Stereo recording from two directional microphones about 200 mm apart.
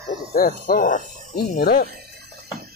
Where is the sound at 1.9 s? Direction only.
50° right (ahead or behind).